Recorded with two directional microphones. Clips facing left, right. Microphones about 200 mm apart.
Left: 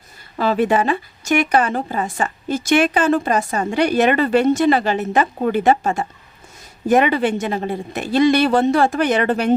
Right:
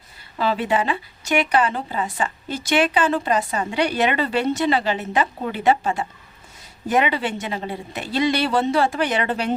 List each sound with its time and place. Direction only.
0.3 s speech: 50° left (ahead or behind)